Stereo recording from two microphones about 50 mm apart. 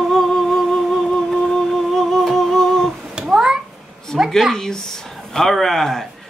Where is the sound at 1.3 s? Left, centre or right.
Centre.